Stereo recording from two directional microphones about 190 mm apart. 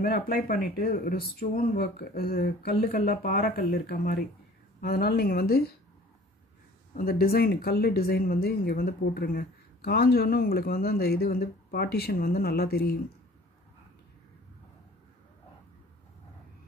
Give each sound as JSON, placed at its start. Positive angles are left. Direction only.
{"t": 0.0, "sound": "speech", "side_deg": 50}
{"t": 7.0, "sound": "speech", "side_deg": 50}